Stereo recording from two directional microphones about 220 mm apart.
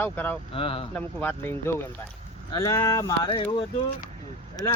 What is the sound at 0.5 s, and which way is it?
Speech, 25° left (ahead or behind).